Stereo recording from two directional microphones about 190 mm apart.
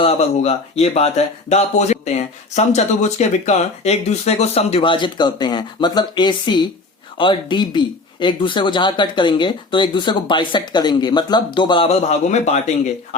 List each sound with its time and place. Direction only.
0.0 s speech: 35° left (ahead or behind)